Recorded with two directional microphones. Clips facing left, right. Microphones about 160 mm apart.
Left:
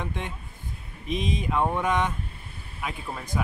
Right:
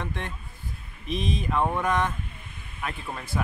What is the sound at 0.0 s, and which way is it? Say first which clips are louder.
Speech: left 1 dB; 15° left (ahead or behind).